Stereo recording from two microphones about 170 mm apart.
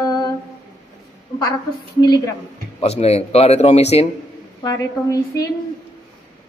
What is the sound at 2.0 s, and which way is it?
Speech, 25° left (ahead or behind).